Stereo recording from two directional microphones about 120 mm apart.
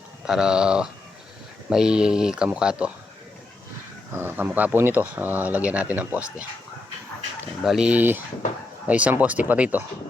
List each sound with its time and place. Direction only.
0.3 s speech: 5° right (ahead or behind)
4.1 s speech: 20° right (ahead or behind)
7.6 s speech: 5° right (ahead or behind)